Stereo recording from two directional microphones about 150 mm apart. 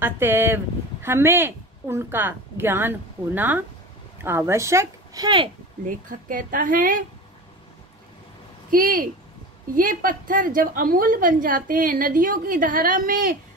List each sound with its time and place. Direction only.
0.0 s a woman's voice: 15° right (ahead or behind); by 5.5 s 30° right (ahead or behind)
5.9 s a woman's voice: 60° right (ahead or behind)
8.6 s a woman's voice: 65° right (ahead or behind)